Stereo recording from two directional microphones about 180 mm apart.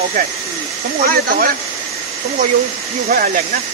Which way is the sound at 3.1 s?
60° right (ahead or behind).